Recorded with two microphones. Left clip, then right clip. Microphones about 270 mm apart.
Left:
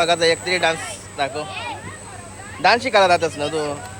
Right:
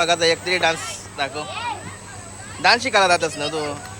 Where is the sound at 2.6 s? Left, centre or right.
Centre.